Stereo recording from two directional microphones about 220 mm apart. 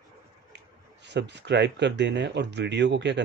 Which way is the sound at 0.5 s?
50° right (ahead or behind).